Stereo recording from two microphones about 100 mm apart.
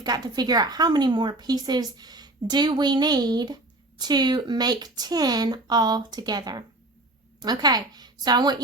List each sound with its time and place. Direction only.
0.0 s a woman's voice: 40° right (ahead or behind)